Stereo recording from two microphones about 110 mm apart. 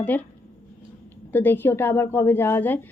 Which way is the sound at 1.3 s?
20° left (ahead or behind).